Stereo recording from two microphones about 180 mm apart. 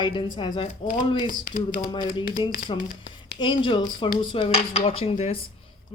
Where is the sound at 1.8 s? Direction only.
30° left (ahead or behind).